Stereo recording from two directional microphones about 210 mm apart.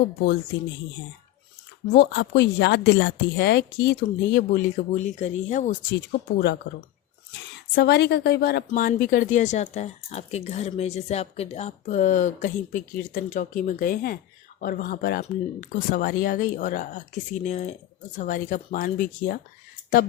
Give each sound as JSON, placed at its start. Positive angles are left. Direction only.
{"t": 1.9, "sound": "speech", "side_deg": 55}
{"t": 5.9, "sound": "speech", "side_deg": 55}
{"t": 7.8, "sound": "speech", "side_deg": 55}